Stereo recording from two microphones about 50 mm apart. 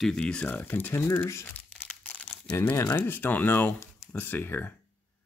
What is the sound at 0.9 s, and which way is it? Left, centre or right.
Speech, left.